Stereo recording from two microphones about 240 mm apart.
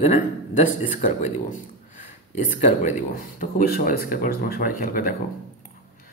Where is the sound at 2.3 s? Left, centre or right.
Left.